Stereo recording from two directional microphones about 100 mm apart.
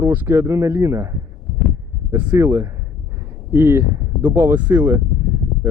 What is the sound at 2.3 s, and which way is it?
Speech, 30° right (ahead or behind).